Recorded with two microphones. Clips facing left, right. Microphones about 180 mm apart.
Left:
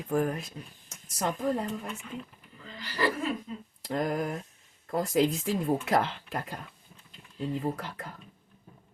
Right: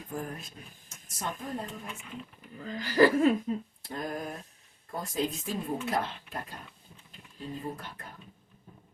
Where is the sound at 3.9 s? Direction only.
90° left.